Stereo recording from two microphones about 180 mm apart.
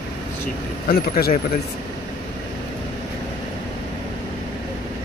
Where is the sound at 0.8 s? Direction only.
55° left (ahead or behind).